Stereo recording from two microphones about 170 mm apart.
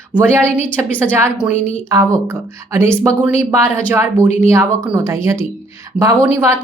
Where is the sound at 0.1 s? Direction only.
10° left (ahead or behind).